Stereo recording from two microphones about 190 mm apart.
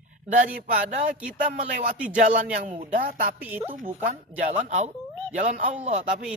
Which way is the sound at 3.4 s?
10° right (ahead or behind).